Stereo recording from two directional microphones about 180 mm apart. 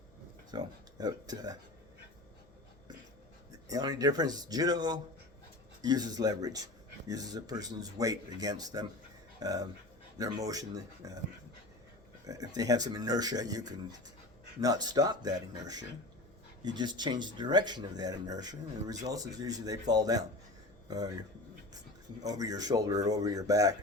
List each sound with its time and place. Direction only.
0.5 s speech: 20° right (ahead or behind)
3.7 s speech: 20° right (ahead or behind)
12.2 s speech: 20° right (ahead or behind)
22.3 s speech: 20° right (ahead or behind)